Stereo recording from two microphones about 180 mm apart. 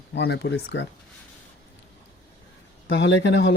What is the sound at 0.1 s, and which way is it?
Speech, 70° left (ahead or behind).